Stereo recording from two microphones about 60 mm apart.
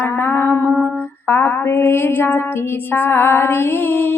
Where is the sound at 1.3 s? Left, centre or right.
Left.